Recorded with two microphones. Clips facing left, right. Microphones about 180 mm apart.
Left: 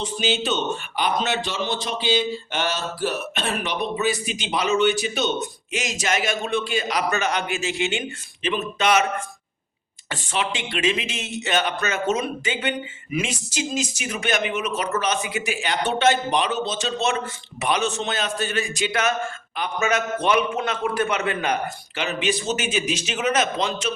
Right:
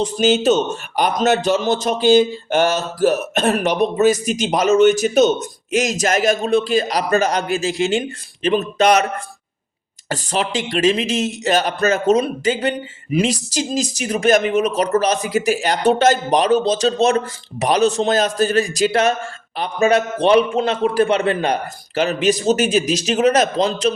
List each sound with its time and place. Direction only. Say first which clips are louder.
0.0 s a man's voice: right 9 dB; 45° right (ahead or behind)